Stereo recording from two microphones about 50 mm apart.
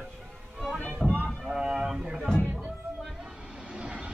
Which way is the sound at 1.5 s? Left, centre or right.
Centre.